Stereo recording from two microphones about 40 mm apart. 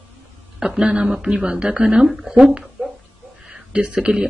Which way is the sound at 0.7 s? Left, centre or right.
Right.